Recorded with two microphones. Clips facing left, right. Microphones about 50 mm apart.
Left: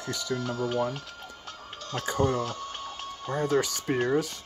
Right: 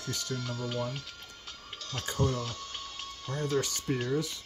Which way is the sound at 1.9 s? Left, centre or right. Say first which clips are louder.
Left 5 dB; centre.